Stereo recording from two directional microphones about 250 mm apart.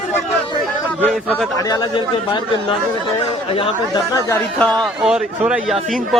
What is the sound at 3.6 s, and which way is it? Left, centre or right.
A man's voice, centre.